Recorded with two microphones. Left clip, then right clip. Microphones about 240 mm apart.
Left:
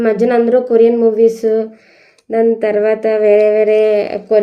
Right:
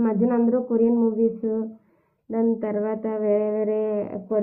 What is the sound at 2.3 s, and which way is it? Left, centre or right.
Speech, centre.